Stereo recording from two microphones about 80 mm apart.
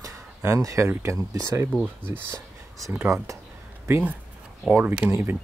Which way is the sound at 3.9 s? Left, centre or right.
Right.